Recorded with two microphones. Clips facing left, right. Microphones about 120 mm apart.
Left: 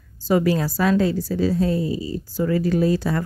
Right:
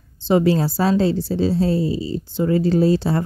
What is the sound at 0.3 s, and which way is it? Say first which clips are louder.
A woman's voice: right 3 dB; 25° right (ahead or behind).